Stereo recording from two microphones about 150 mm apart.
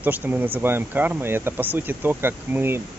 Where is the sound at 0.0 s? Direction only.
10° right (ahead or behind).